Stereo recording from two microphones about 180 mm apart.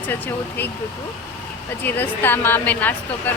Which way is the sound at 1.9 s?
10° left (ahead or behind).